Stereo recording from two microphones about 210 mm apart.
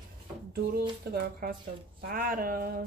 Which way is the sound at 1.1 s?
45° right (ahead or behind).